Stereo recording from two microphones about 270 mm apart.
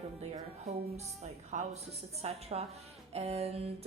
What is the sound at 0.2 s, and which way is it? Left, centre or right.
A woman's voice, right.